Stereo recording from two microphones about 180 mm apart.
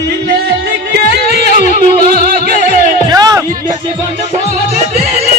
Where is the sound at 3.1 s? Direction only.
20° right (ahead or behind).